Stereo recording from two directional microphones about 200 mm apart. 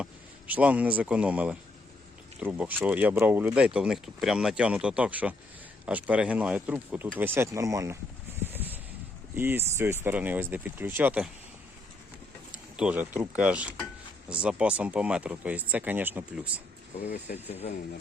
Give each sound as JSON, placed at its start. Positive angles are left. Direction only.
{"t": 0.0, "sound": "speech", "side_deg": -5}
{"t": 8.4, "sound": "a sound", "side_deg": -10}
{"t": 9.3, "sound": "speech", "side_deg": -10}
{"t": 12.5, "sound": "a sound", "side_deg": -5}
{"t": 14.4, "sound": "speech", "side_deg": -5}
{"t": 17.3, "sound": "speech", "side_deg": 45}